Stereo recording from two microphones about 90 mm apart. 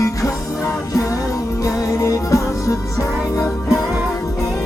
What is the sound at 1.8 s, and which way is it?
Music, 35° left (ahead or behind).